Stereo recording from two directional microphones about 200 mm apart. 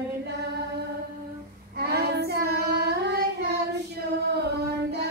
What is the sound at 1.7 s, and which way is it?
Child singing, 55° right (ahead or behind).